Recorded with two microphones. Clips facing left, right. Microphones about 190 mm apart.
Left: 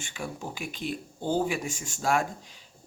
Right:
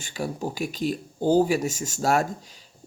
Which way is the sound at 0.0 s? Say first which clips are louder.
Right 7 dB; 35° right (ahead or behind).